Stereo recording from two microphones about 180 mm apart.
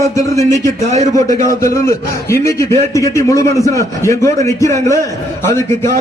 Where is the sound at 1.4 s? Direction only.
15° left (ahead or behind).